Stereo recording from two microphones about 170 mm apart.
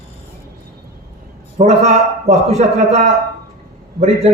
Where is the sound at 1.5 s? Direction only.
40° right (ahead or behind).